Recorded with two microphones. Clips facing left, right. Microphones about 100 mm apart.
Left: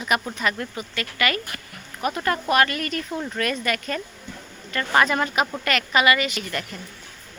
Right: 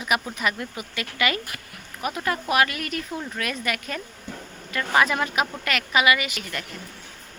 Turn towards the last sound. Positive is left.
turn(degrees=-5)  # may be behind; listen again after turning